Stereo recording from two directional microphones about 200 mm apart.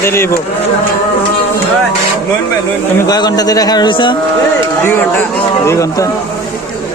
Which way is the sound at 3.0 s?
20° left (ahead or behind).